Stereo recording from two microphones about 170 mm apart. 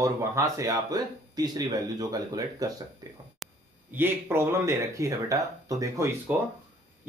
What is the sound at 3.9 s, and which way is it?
Speech, 15° right (ahead or behind).